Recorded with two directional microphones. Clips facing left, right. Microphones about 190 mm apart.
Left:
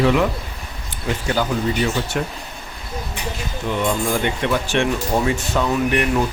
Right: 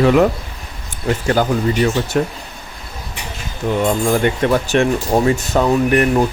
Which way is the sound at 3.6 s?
45° right (ahead or behind).